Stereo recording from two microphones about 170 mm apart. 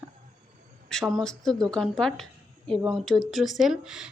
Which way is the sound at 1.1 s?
5° left (ahead or behind).